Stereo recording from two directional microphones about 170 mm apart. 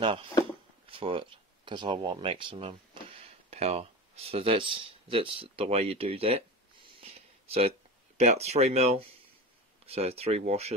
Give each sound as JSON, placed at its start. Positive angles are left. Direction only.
{"t": 0.0, "sound": "speech", "side_deg": -30}
{"t": 6.9, "sound": "a sound", "side_deg": -35}
{"t": 8.2, "sound": "speech", "side_deg": -40}